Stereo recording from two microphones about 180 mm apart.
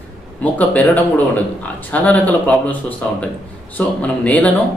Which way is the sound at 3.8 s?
10° left (ahead or behind).